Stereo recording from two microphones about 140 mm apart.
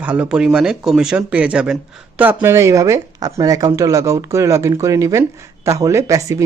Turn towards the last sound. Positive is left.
turn(degrees=-20)  # may be behind; listen again after turning